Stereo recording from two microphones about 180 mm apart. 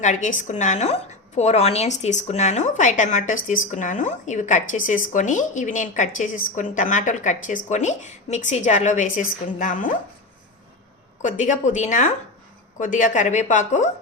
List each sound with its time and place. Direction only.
0.0 s a woman's voice: 45° left (ahead or behind)
11.2 s a woman's voice: 45° left (ahead or behind)